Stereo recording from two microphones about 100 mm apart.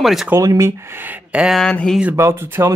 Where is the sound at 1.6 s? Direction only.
5° left (ahead or behind).